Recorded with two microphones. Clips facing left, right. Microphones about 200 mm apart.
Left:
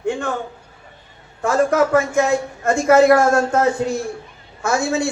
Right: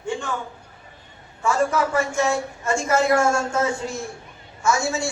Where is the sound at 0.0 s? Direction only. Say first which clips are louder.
Left 5 dB; 60° left (ahead or behind).